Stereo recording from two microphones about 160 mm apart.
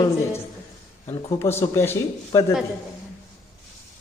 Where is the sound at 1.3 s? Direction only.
15° left (ahead or behind).